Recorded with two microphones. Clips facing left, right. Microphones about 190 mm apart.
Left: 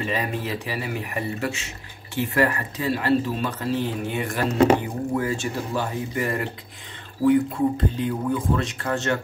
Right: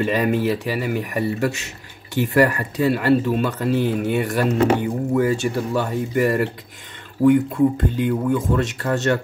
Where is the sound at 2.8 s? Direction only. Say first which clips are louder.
Right 5 dB; 60° right (ahead or behind).